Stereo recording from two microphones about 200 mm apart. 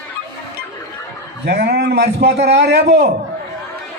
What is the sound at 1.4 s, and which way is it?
A man's voice, 55° right (ahead or behind).